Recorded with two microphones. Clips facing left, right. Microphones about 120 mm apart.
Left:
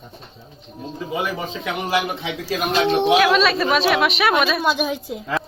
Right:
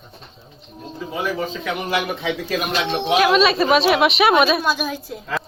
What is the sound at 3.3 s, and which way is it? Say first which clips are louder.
A woman's voice: right 2 dB; 10° right (ahead or behind).